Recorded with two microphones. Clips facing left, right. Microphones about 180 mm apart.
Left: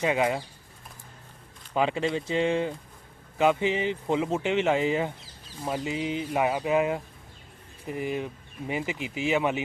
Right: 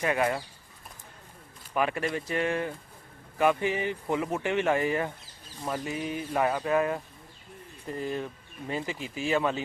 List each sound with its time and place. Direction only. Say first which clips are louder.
0.0 s speech: left 2 dB; 15° left (ahead or behind)
1.7 s speech: left 3 dB; 20° left (ahead or behind)